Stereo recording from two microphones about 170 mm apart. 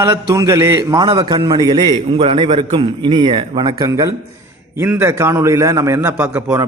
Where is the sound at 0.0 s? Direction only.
20° right (ahead or behind).